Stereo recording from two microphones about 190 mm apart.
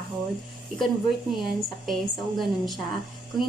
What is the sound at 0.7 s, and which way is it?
A woman's voice, centre (ahead or behind).